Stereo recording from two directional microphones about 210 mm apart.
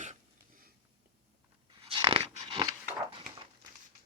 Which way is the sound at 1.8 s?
20° right (ahead or behind).